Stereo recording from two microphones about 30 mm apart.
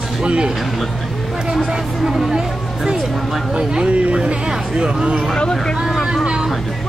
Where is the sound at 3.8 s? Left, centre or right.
Right.